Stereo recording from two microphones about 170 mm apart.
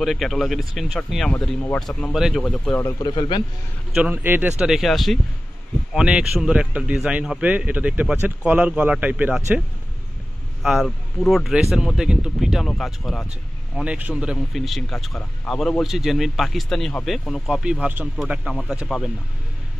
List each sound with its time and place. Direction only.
0.0 s speech: centre (ahead or behind)
2.8 s a man's voice: 25° left (ahead or behind)
3.9 s a man's voice: 10° right (ahead or behind)
10.6 s speech: centre (ahead or behind)